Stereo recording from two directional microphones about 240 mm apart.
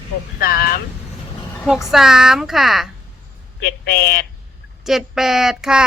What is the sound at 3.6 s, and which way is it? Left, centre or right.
Speech, left.